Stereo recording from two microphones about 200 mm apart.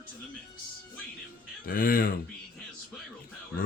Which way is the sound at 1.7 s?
45° left (ahead or behind).